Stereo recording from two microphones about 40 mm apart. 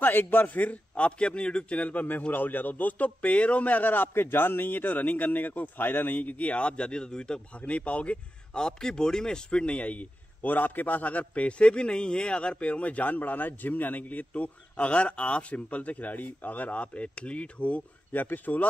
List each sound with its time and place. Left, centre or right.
0.0 s a man's voice: left
0.5 s a man's voice: left
7.6 s a man's voice: left
8.5 s a man's voice: centre; by 17.8 s left
18.1 s a man's voice: left